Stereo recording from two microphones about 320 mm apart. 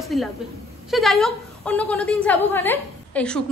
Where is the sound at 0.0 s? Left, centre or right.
Centre.